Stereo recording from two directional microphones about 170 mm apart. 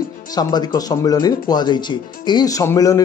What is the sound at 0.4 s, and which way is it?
Speech, 25° left (ahead or behind).